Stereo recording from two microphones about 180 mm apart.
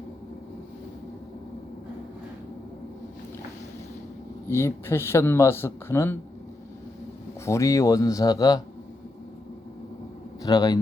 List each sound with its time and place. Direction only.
4.4 s speech: 15° left (ahead or behind)
7.4 s speech: 15° left (ahead or behind)
10.4 s speech: 20° left (ahead or behind)